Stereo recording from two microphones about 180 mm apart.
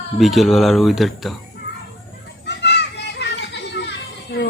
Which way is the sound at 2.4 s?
70° left (ahead or behind).